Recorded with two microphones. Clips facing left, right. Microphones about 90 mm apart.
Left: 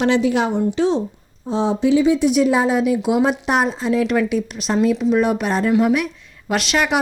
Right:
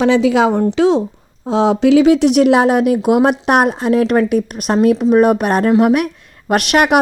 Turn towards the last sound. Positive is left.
turn(degrees=-60)  # may be behind; listen again after turning